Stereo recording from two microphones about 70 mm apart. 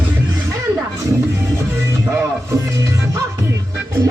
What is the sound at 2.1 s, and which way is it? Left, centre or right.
Music, right.